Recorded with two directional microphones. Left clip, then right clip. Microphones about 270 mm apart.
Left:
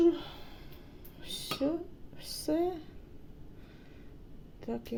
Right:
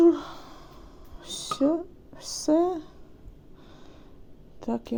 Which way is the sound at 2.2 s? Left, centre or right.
Right.